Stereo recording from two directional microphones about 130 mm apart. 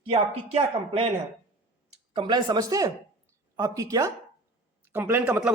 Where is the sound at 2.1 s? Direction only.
35° right (ahead or behind).